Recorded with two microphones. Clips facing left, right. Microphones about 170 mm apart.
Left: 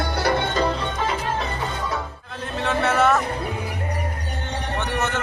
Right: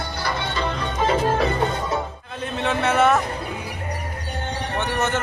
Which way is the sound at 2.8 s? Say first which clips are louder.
Right 1 dB; centre (ahead or behind).